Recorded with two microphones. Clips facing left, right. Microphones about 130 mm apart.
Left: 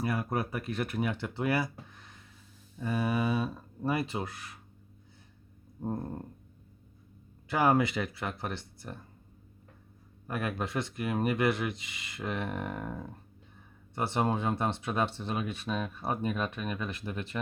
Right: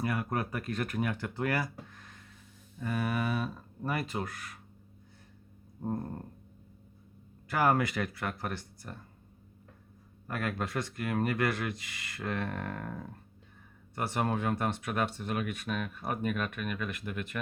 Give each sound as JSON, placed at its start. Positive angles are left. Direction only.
{"t": 0.0, "sound": "speech", "side_deg": 30}
{"t": 1.7, "sound": "a sound", "side_deg": 20}
{"t": 2.8, "sound": "speech", "side_deg": 20}
{"t": 5.8, "sound": "a sound", "side_deg": 10}
{"t": 7.5, "sound": "speech", "side_deg": 20}
{"t": 10.2, "sound": "speech", "side_deg": 20}
{"t": 13.9, "sound": "speech", "side_deg": 25}